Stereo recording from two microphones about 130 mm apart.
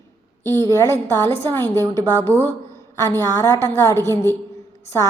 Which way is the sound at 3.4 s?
25° left (ahead or behind).